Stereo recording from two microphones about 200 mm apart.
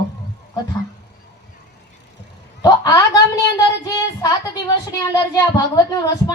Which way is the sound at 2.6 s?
20° left (ahead or behind).